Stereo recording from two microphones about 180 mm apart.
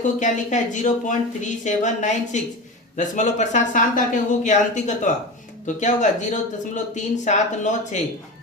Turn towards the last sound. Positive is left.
turn(degrees=40)  # may be behind; listen again after turning